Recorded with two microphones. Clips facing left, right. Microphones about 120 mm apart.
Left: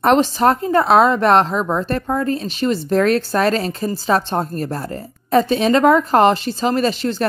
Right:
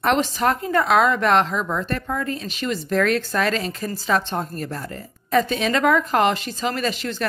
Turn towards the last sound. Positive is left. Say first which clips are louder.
# left 7 dB
turn(degrees=35)  # may be behind; listen again after turning